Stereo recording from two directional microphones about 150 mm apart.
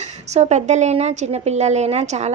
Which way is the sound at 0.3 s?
45° right (ahead or behind).